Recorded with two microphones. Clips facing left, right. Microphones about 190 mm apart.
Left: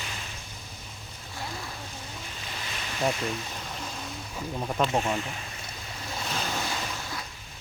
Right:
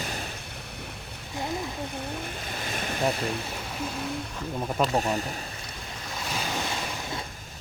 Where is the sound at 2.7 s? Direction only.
50° right (ahead or behind).